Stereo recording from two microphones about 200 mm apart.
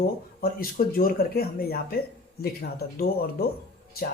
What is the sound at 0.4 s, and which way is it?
Speech, 45° left (ahead or behind).